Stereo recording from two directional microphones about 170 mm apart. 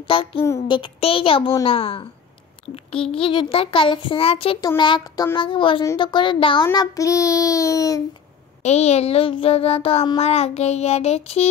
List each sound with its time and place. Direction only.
0.1 s child singing: 30° left (ahead or behind)
4.6 s a child's voice: 25° left (ahead or behind)
8.6 s child singing: 40° left (ahead or behind)